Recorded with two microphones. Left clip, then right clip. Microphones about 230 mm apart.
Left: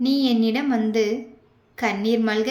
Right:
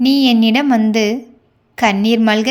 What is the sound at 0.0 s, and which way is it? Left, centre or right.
A woman's voice, right.